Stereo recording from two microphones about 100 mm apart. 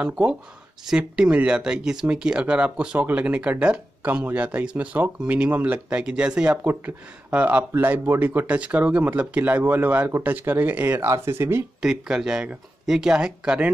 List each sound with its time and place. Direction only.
0.0 s speech: 10° right (ahead or behind); by 11.6 s 25° right (ahead or behind)
11.8 s speech: 5° right (ahead or behind)